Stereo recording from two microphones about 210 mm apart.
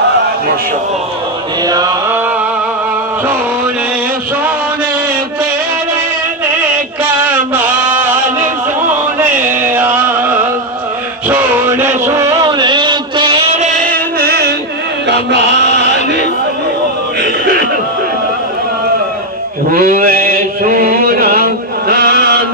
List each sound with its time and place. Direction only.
1.7 s mantra: 20° right (ahead or behind)
7.2 s chant: 10° right (ahead or behind)
11.2 s a sound: 5° right (ahead or behind); by 14.5 s 45° right (ahead or behind)
15.0 s chant: 55° right (ahead or behind)
19.7 s mantra: 40° right (ahead or behind)